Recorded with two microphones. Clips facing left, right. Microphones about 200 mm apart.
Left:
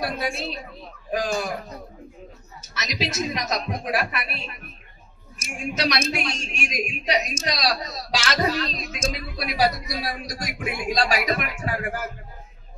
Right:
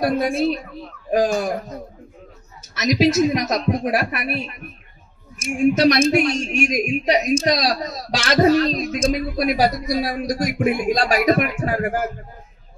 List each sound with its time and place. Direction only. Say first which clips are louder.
0.0 s speech: right 9 dB; 50° right (ahead or behind)
2.7 s speech: right 12 dB; 50° right (ahead or behind)
5.8 s speech: right 6 dB; 50° right (ahead or behind)